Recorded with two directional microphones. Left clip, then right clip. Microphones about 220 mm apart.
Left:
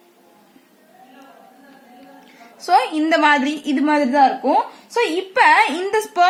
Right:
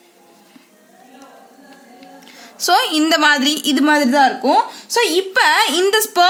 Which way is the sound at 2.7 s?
45° right (ahead or behind).